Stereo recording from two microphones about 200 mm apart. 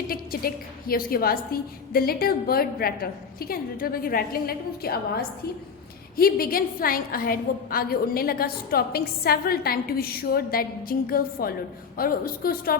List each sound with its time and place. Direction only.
0.1 s a woman's voice: 45° left (ahead or behind)